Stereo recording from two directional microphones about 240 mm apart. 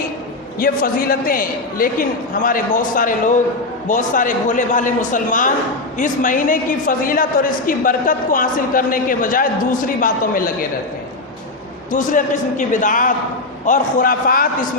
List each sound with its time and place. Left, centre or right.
0.6 s a woman's voice: left
11.9 s a woman's voice: left